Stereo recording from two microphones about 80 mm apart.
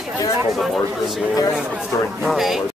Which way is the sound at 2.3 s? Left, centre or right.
Centre.